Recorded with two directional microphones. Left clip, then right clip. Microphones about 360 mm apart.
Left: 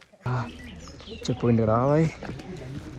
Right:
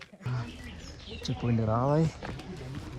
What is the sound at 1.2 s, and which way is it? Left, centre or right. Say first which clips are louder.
Speech: left 9 dB; centre.